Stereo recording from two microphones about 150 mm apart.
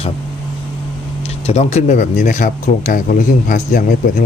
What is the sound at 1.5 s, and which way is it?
Speech, 45° left (ahead or behind).